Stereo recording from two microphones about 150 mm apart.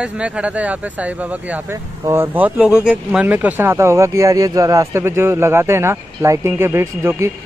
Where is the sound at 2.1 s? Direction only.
15° right (ahead or behind).